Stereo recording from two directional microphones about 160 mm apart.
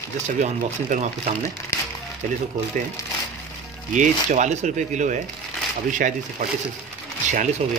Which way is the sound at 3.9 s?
50° right (ahead or behind).